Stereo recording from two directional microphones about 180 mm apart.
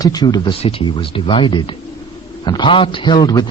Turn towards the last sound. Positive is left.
turn(degrees=20)  # may be behind; listen again after turning